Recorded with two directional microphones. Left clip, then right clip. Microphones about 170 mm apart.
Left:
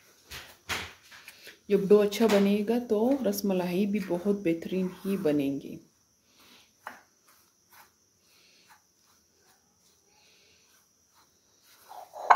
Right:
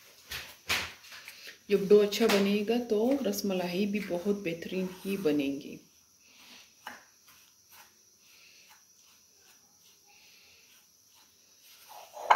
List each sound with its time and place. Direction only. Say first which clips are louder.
1.4 s speech: left 2 dB; 55° left (ahead or behind)